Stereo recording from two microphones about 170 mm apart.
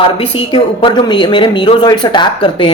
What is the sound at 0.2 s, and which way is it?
A woman's voice, 35° left (ahead or behind).